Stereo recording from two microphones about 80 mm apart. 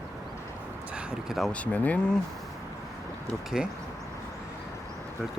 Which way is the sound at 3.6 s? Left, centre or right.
Centre.